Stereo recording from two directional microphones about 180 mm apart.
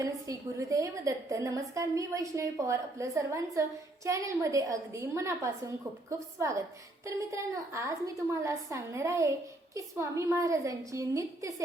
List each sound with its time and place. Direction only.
0.0 s a woman's voice: 20° right (ahead or behind)